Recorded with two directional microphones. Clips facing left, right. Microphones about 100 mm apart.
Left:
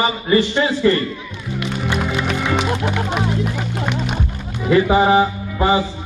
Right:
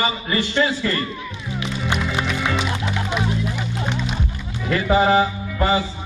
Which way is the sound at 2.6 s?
55° left (ahead or behind).